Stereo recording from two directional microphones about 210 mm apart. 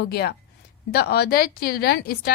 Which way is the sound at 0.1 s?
50° left (ahead or behind).